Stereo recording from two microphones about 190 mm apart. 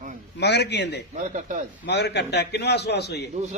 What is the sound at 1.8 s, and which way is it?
A man's voice, 60° left (ahead or behind).